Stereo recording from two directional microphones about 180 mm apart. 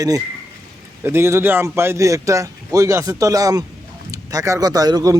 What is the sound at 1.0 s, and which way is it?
A man's voice, 15° right (ahead or behind).